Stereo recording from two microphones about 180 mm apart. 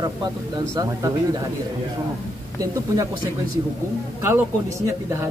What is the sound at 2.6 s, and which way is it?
Speech, 20° right (ahead or behind).